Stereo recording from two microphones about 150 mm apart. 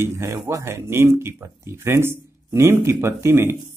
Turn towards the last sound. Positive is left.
turn(degrees=-15)  # may be behind; listen again after turning